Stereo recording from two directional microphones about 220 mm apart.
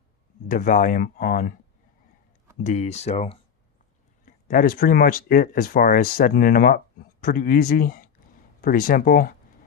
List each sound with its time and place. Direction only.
0.4 s speech: 35° left (ahead or behind)
2.6 s speech: 30° left (ahead or behind)